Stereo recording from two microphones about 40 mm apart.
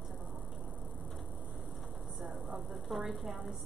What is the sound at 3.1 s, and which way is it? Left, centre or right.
Speech, centre.